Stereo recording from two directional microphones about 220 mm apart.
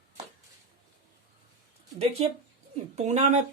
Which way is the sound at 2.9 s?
30° right (ahead or behind).